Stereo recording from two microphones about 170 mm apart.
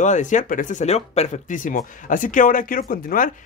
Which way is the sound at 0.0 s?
45° left (ahead or behind).